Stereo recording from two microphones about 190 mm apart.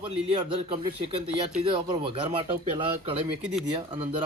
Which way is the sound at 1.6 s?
25° right (ahead or behind).